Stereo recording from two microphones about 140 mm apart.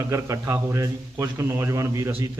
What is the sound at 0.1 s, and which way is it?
A man's voice, 20° right (ahead or behind).